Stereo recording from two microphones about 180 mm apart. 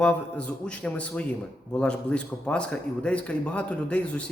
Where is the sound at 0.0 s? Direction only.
5° left (ahead or behind).